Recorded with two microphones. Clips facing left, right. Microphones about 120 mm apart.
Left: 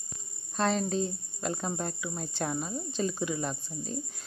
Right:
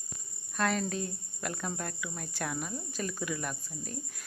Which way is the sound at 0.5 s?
25° left (ahead or behind).